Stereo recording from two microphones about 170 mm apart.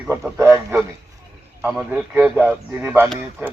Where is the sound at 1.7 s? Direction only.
5° right (ahead or behind).